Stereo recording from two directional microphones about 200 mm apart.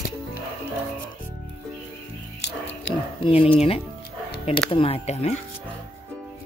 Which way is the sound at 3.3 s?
30° left (ahead or behind).